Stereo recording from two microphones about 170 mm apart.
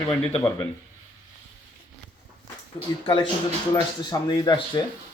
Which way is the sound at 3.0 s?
30° left (ahead or behind).